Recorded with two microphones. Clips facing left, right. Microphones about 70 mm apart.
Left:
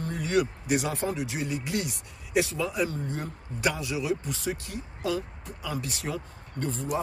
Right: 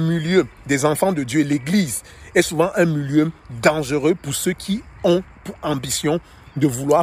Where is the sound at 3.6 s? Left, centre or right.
Right.